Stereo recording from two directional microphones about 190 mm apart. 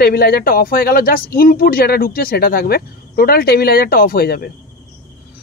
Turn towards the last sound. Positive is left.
turn(degrees=55)  # may be behind; listen again after turning